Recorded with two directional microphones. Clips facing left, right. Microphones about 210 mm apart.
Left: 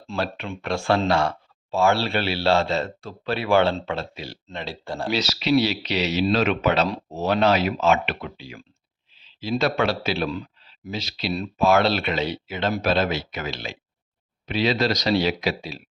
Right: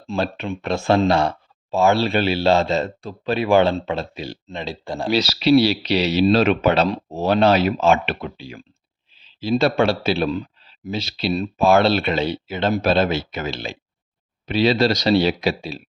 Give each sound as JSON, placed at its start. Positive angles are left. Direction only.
{"t": 0.1, "sound": "speech", "side_deg": -20}
{"t": 5.0, "sound": "speech", "side_deg": -35}